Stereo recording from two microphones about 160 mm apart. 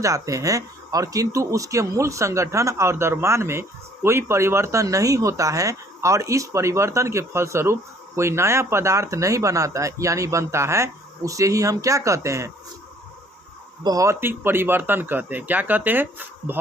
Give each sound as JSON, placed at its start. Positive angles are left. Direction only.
{"t": 0.0, "sound": "speech", "side_deg": -20}
{"t": 13.8, "sound": "speech", "side_deg": -20}